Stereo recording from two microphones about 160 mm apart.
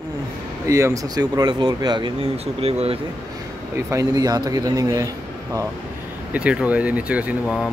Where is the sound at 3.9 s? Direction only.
20° right (ahead or behind).